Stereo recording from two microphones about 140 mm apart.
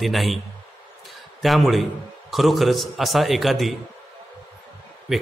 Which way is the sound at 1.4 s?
Centre (ahead or behind).